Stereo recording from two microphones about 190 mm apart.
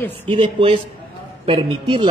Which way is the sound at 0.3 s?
30° right (ahead or behind).